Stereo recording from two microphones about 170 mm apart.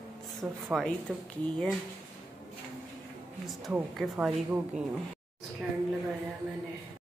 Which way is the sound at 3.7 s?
5° right (ahead or behind).